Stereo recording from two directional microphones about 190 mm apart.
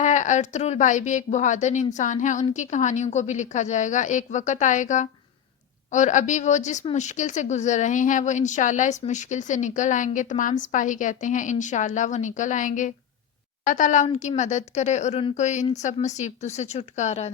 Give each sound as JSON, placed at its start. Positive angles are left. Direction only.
{"t": 0.0, "sound": "a woman's voice", "side_deg": 40}